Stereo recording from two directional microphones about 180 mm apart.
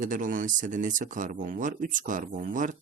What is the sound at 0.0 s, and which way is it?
Speech, 45° right (ahead or behind).